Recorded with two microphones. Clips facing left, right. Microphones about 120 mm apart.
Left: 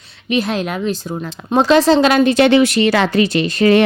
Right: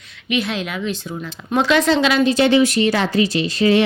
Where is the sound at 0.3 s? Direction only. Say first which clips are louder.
Left 4 dB; 40° left (ahead or behind).